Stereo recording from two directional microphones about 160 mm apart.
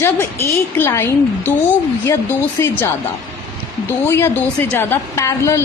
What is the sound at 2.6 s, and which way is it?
Speech, 15° left (ahead or behind).